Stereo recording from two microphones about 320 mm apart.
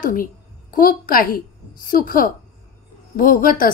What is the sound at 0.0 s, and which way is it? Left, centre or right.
A woman's voice, left.